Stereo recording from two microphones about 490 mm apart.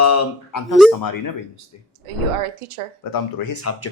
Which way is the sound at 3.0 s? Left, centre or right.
Left.